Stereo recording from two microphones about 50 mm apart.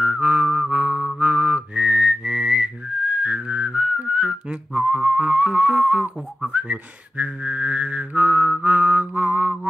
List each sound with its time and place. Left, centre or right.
0.0 s music: right
1.2 s whistling: right
4.2 s music: centre
6.5 s whistling: right